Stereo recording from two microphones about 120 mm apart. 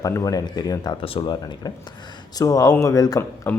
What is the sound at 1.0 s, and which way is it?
Speech, 45° left (ahead or behind).